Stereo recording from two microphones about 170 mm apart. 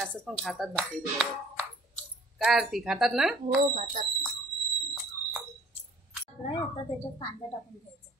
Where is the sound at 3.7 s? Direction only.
45° right (ahead or behind).